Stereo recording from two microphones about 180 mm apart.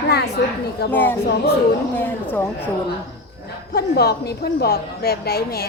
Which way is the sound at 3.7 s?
65° left (ahead or behind).